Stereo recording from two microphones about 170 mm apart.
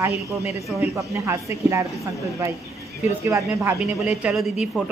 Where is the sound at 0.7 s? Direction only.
20° right (ahead or behind).